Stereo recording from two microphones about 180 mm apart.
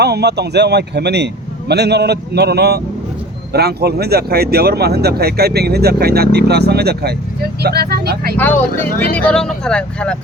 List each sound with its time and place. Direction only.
0.0 s speech: 65° right (ahead or behind)
8.4 s speech: 10° left (ahead or behind)